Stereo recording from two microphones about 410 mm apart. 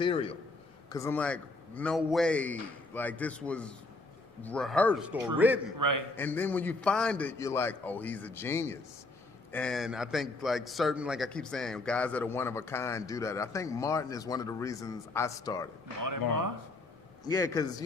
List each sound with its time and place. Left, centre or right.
0.0 s a man's voice: centre
5.8 s a man's voice: right
6.1 s a man's voice: centre
17.2 s a man's voice: centre